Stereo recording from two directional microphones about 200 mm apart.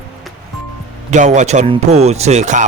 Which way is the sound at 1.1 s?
35° right (ahead or behind).